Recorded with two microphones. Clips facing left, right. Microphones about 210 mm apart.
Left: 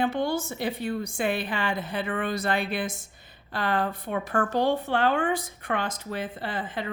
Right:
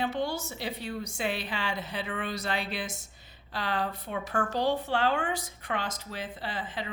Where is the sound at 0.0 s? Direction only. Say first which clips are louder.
Left 5 dB; 55° left (ahead or behind).